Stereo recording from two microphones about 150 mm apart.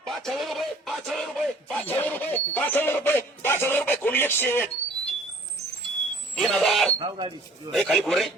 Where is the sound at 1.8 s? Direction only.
10° left (ahead or behind).